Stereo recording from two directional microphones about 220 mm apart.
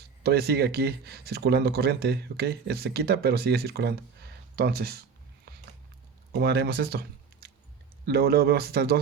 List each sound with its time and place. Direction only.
0.2 s speech: 45° right (ahead or behind)
6.4 s speech: 50° right (ahead or behind)
8.0 s speech: 45° right (ahead or behind)